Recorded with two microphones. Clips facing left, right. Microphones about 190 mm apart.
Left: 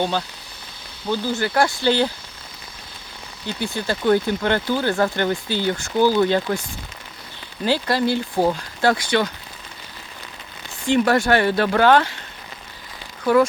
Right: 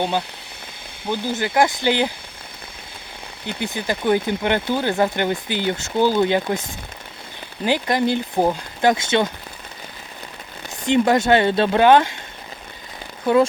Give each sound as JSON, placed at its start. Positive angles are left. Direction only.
{"t": 0.0, "sound": "speech", "side_deg": -15}
{"t": 3.4, "sound": "speech", "side_deg": -20}
{"t": 10.8, "sound": "speech", "side_deg": -20}